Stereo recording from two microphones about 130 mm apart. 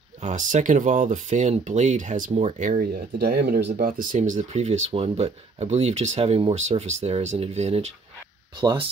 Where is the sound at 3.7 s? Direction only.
90° right; by 7.9 s 55° right (ahead or behind).